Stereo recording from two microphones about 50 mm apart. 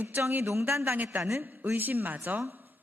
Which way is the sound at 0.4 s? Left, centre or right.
Right.